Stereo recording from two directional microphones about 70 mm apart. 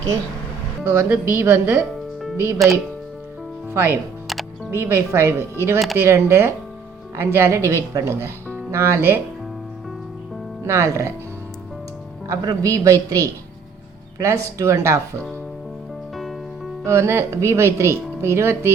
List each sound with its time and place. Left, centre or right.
0.9 s speech: right
3.7 s a woman's voice: right
10.7 s speech: right
12.3 s a woman's voice: right
16.8 s speech: right